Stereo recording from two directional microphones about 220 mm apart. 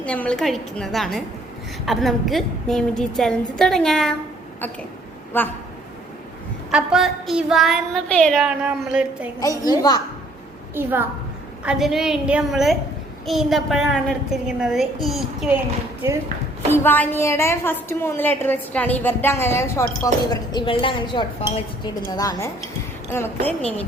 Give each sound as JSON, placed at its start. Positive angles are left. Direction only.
{"t": 0.0, "sound": "a woman's voice", "side_deg": 5}
{"t": 5.3, "sound": "a woman's voice", "side_deg": 10}
{"t": 6.7, "sound": "a woman's voice", "side_deg": 0}
{"t": 9.4, "sound": "a woman's voice", "side_deg": 15}
{"t": 10.8, "sound": "a woman's voice", "side_deg": -10}
{"t": 16.6, "sound": "a woman's voice", "side_deg": 10}